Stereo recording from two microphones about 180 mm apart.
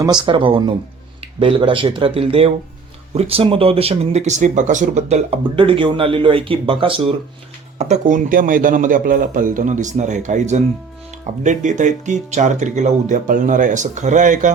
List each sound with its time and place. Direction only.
0.0 s speech: 25° right (ahead or behind); by 14.5 s 45° right (ahead or behind)